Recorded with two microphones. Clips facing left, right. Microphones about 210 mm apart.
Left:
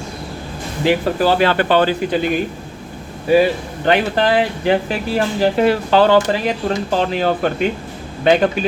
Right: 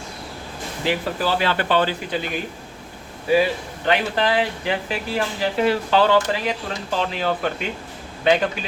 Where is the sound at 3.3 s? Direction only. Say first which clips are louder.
Left 5 dB; 50° left (ahead or behind).